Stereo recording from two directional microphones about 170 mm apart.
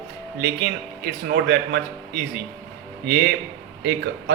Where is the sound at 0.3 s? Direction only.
70° right (ahead or behind).